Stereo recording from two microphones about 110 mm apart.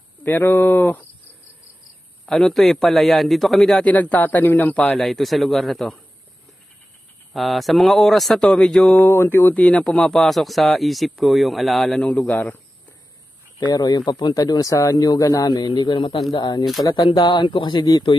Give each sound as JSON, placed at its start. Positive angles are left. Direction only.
{"t": 0.2, "sound": "speech", "side_deg": 15}
{"t": 2.2, "sound": "a man's voice", "side_deg": 5}
{"t": 3.9, "sound": "speech", "side_deg": 15}
{"t": 7.3, "sound": "a man's voice", "side_deg": 0}
{"t": 12.1, "sound": "speech", "side_deg": 15}
{"t": 13.7, "sound": "speech", "side_deg": 40}